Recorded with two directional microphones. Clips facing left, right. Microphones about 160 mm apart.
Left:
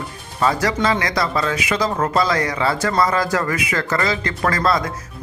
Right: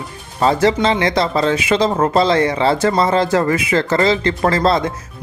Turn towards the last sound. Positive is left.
turn(degrees=-25)  # may be behind; listen again after turning